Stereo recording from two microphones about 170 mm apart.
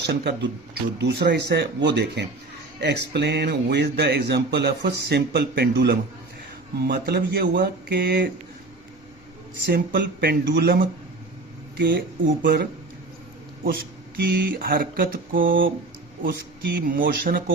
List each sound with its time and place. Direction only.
0.0 s speech: 70° right (ahead or behind)
0.9 s speech: 90° right; by 6.0 s 70° right (ahead or behind)
7.0 s speech: 70° right (ahead or behind)
9.6 s speech: 65° right (ahead or behind)
14.2 s mantra: 70° right (ahead or behind)